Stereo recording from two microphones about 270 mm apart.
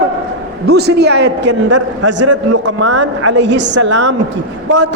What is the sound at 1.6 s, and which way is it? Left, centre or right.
A woman's voice, right.